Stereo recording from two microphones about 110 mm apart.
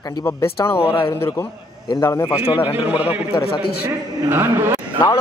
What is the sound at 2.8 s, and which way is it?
Speech, 15° right (ahead or behind).